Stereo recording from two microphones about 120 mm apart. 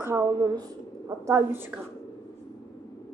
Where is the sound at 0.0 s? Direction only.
20° right (ahead or behind).